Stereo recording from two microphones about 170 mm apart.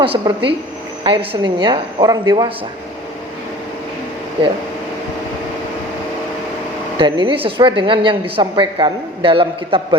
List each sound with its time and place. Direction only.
0.0 s a woman's voice: 30° right (ahead or behind)
6.9 s a woman's voice: 30° right (ahead or behind)